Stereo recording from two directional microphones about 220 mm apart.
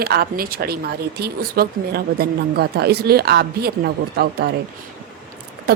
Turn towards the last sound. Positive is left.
turn(degrees=-45)  # may be behind; listen again after turning